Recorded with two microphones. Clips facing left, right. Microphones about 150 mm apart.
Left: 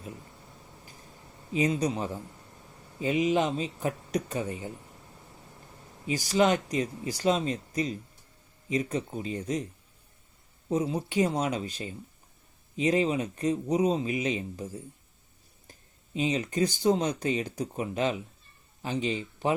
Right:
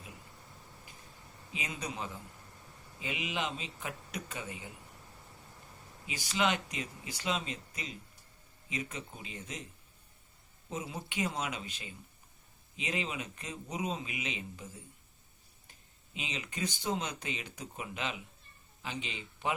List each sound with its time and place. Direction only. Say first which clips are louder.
1.5 s speech: left 13 dB; 40° left (ahead or behind)
6.1 s speech: left 8 dB; 40° left (ahead or behind)
10.7 s speech: left 12 dB; 35° left (ahead or behind)
16.1 s speech: left 13 dB; 40° left (ahead or behind)